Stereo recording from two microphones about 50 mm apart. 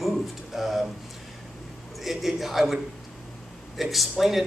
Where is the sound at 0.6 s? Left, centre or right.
Centre.